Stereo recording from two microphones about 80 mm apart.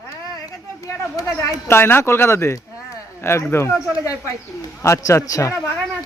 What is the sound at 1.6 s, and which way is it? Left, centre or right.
Speech, left.